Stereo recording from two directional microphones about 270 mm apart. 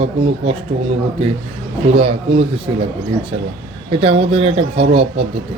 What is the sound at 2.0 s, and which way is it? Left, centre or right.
Speech, right.